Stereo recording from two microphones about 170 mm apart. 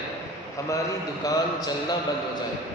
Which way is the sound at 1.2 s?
20° left (ahead or behind).